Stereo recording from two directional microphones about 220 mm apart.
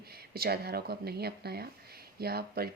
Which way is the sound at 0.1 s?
45° right (ahead or behind).